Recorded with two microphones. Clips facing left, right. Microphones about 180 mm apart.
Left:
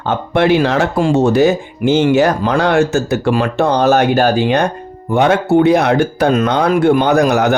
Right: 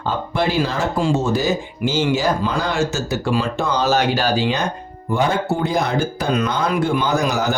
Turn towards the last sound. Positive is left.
turn(degrees=65)  # may be behind; listen again after turning